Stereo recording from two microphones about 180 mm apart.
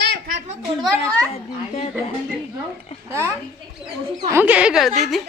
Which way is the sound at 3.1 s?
15° right (ahead or behind).